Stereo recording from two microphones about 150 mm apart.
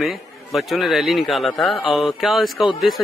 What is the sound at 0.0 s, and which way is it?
A man's voice, centre (ahead or behind).